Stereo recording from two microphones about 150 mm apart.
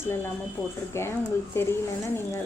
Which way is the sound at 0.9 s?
15° left (ahead or behind).